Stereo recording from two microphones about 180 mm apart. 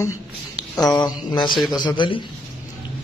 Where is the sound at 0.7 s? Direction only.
20° left (ahead or behind).